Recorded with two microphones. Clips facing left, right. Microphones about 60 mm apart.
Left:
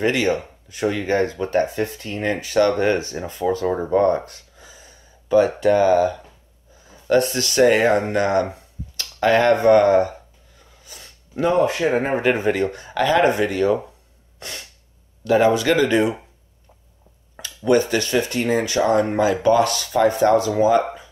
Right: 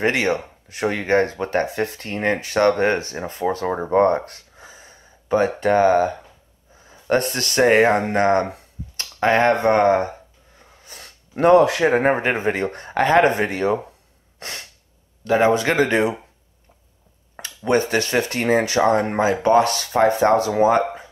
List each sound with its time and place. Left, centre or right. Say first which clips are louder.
0.0 s speech: even; right
10.6 s a sound: right 2 dB; right
11.5 s speech: right 5 dB; right
11.8 s speech: right 2 dB; right
15.2 s speech: left 1 dB; right
17.4 s speech: left 2 dB; right